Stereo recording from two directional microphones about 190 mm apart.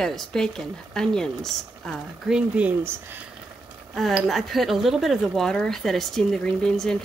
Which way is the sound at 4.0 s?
Centre (ahead or behind).